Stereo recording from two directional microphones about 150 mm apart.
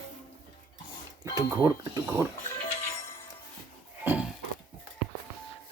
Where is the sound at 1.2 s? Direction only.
25° right (ahead or behind).